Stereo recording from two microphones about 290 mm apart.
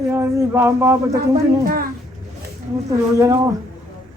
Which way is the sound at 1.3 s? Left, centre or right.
Right.